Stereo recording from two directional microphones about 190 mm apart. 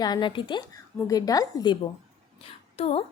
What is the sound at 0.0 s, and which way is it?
A woman's voice, 25° left (ahead or behind).